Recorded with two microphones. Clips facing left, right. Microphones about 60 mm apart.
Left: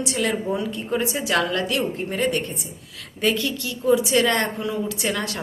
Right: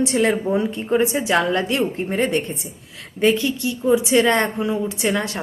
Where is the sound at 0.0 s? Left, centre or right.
Right.